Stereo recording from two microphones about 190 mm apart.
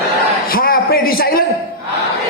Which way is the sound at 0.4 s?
50° left (ahead or behind).